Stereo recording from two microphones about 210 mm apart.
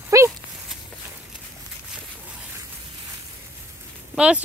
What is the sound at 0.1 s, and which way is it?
Dog, 15° right (ahead or behind).